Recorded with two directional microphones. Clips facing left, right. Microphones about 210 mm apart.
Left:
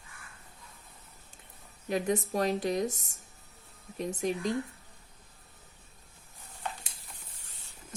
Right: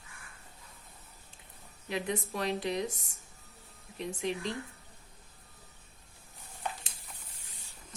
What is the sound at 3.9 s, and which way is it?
Speech, 45° left (ahead or behind).